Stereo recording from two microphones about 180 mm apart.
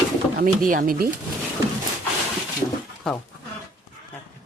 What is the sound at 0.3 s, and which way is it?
Speech, 50° right (ahead or behind).